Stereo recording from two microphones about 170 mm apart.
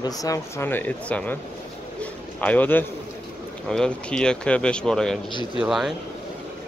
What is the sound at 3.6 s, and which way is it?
Speech, 5° left (ahead or behind).